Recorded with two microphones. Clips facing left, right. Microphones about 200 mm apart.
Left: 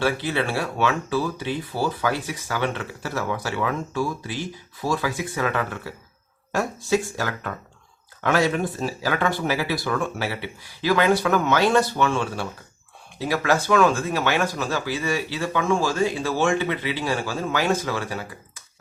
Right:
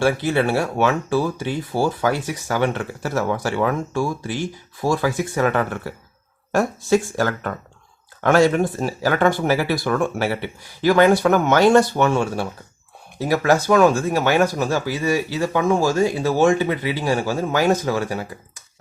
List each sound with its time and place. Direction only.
0.0 s speech: 45° right (ahead or behind)